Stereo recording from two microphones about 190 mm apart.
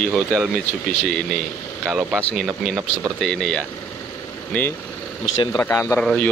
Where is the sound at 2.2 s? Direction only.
10° left (ahead or behind).